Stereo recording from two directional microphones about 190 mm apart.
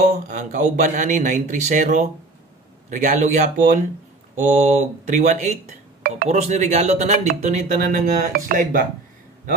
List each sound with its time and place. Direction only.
0.0 s speech: 45° right (ahead or behind)